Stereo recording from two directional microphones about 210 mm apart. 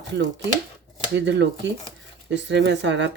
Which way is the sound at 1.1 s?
55° right (ahead or behind).